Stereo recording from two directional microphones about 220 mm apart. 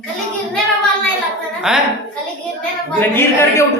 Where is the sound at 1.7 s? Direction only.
Centre (ahead or behind).